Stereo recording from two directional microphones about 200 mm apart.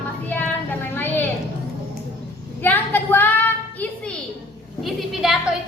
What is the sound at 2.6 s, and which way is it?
A woman's voice, 10° left (ahead or behind).